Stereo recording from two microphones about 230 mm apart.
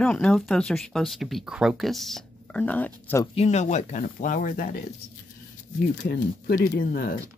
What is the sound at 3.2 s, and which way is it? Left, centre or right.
Speech, left.